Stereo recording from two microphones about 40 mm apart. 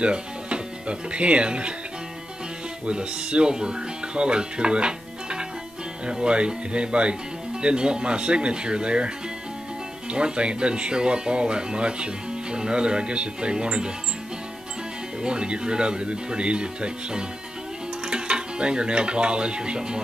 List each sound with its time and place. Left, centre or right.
0.0 s speech: right
2.9 s speech: right
15.2 s speech: right